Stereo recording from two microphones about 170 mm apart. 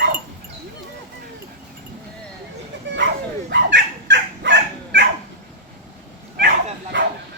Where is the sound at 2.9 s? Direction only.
90° right.